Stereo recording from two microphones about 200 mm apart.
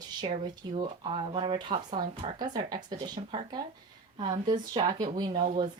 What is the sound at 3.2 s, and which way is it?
Speech, 30° right (ahead or behind).